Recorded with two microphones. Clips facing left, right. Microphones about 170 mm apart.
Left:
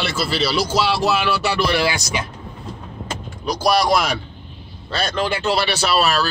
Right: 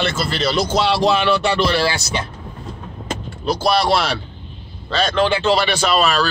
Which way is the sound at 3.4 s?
10° left (ahead or behind).